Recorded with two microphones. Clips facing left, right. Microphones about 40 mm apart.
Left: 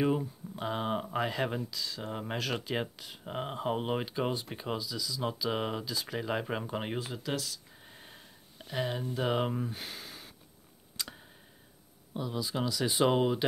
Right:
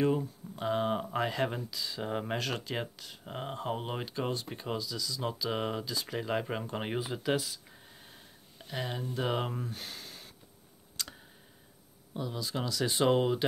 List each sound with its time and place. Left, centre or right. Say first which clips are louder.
0.0 s speech: even; centre
2.3 s speech: left 1 dB; centre
7.8 s a sound: left 2 dB; centre
8.6 s speech: left 3 dB; centre
12.1 s speech: left 1 dB; centre